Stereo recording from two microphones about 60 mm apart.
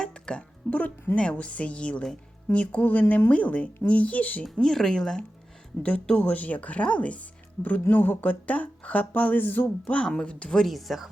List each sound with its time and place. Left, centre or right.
0.0 s music: centre
0.7 s speech: left
4.5 s speech: centre
5.8 s speech: left
9.9 s speech: centre
10.7 s speech: centre